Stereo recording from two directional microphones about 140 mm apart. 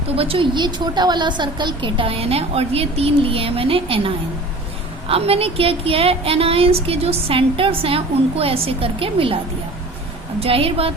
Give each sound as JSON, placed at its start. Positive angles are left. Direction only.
{"t": 0.2, "sound": "a woman's voice", "side_deg": -40}
{"t": 10.4, "sound": "a woman's voice", "side_deg": -45}